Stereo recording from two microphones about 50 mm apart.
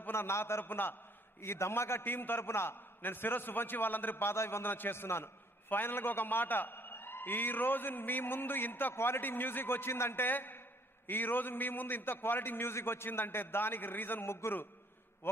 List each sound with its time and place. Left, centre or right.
0.1 s a man's voice: left
2.0 s a man's voice: left
4.7 s a man's voice: left
8.9 s a man's voice: left